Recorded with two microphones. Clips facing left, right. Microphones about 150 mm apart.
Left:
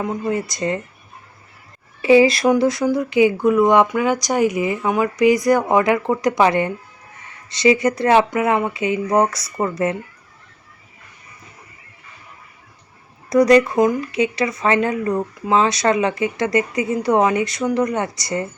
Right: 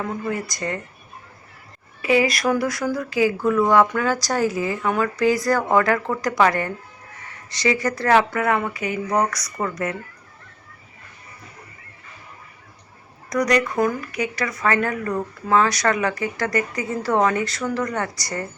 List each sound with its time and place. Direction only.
0.0 s speech: 20° left (ahead or behind)
2.0 s speech: 25° left (ahead or behind)
13.3 s speech: 25° left (ahead or behind)